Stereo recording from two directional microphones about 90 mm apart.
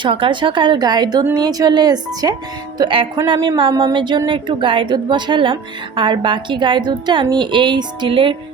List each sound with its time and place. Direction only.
0.0 s a woman's voice: 70° right (ahead or behind); by 2.3 s 50° right (ahead or behind)
2.7 s speech: 70° right (ahead or behind)
3.2 s a woman's voice: 60° right (ahead or behind)